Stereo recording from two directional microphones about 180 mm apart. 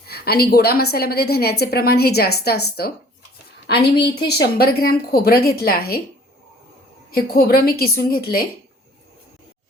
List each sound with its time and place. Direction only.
0.1 s a woman's voice: 60° left (ahead or behind)
7.1 s a woman's voice: 55° left (ahead or behind)